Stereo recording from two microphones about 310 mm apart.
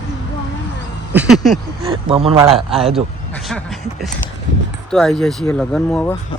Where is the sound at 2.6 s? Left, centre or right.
Centre.